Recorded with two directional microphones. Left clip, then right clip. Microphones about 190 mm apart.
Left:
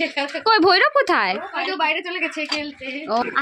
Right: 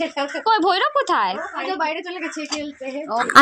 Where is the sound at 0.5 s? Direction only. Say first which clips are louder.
Left 3 dB; 30° left (ahead or behind).